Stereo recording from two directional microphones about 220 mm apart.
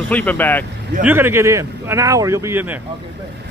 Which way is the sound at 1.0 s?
10° right (ahead or behind).